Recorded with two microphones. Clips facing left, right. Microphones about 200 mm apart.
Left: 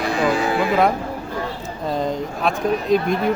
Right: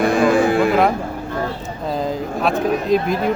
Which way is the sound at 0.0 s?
50° right (ahead or behind).